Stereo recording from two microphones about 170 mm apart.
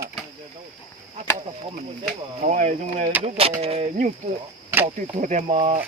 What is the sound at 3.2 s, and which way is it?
Speech, 35° right (ahead or behind).